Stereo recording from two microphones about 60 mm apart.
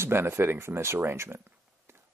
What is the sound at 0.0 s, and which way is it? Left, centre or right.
Speech, right.